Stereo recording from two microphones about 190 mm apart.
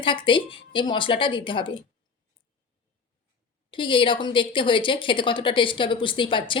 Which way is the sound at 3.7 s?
25° left (ahead or behind).